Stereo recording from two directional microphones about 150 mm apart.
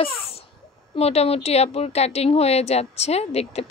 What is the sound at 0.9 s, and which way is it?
Speech, 45° left (ahead or behind).